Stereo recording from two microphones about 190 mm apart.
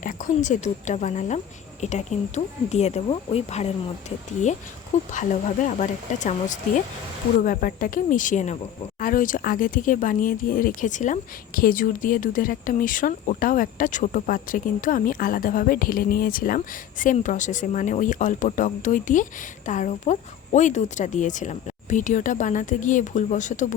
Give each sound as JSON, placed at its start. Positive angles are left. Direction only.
{"t": 0.0, "sound": "speech", "side_deg": 45}
{"t": 5.1, "sound": "speech", "side_deg": 40}